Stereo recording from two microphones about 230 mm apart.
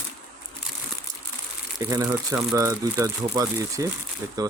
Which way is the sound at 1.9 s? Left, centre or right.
Centre.